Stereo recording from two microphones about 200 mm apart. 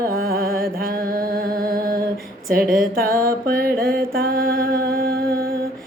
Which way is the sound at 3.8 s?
50° right (ahead or behind).